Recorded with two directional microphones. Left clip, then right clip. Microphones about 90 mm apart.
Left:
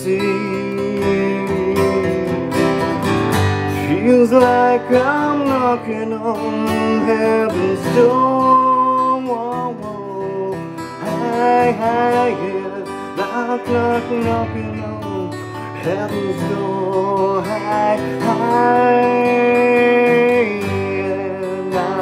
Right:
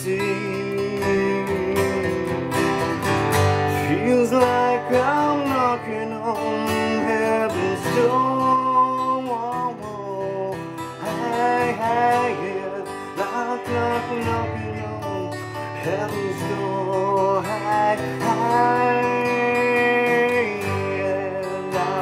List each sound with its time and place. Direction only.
0.1 s music: 30° left (ahead or behind)
3.8 s music: 25° left (ahead or behind)
11.1 s music: 25° left (ahead or behind)
16.9 s music: 25° left (ahead or behind)